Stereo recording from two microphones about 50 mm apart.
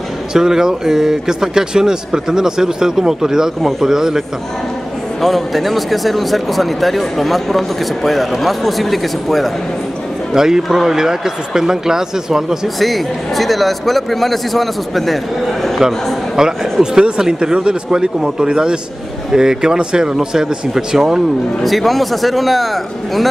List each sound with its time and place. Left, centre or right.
0.3 s speech: centre
5.2 s speech: centre
10.3 s speech: centre
12.7 s speech: centre
16.4 s speech: centre
21.6 s speech: centre